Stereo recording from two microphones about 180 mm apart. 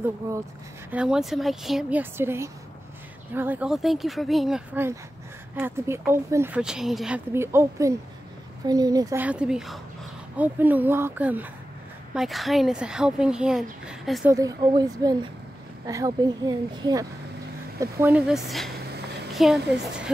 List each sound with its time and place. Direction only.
0.9 s speech: 5° right (ahead or behind)
7.3 s a woman's voice: 15° right (ahead or behind)
9.2 s speech: 5° right (ahead or behind)
14.3 s a woman's voice: 20° right (ahead or behind); by 20.1 s 5° right (ahead or behind)